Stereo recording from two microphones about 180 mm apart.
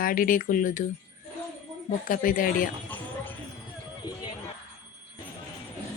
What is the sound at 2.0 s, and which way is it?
Speech, 50° left (ahead or behind).